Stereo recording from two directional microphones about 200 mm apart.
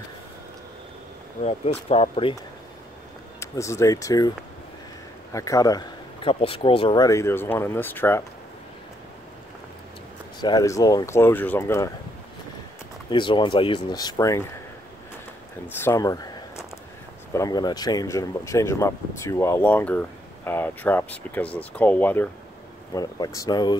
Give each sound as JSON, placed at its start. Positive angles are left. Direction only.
{"t": 1.9, "sound": "speech", "side_deg": 30}
{"t": 3.3, "sound": "speech", "side_deg": 15}
{"t": 5.3, "sound": "speech", "side_deg": 15}
{"t": 10.4, "sound": "speech", "side_deg": 20}
{"t": 13.1, "sound": "speech", "side_deg": 25}
{"t": 15.7, "sound": "a sound", "side_deg": 10}
{"t": 17.3, "sound": "speech", "side_deg": 15}